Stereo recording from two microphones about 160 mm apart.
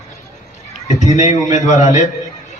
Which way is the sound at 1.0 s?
45° left (ahead or behind).